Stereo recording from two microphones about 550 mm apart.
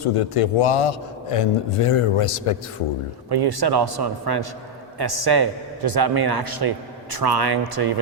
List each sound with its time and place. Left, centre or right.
0.0 s a man's voice: left
3.2 s a man's voice: right